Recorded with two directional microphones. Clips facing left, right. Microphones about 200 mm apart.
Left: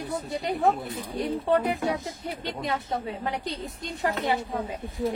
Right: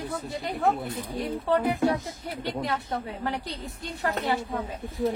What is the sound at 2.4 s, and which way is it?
A woman's voice, 20° left (ahead or behind).